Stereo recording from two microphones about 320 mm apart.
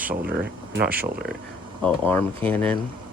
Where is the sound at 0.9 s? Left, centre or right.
Right.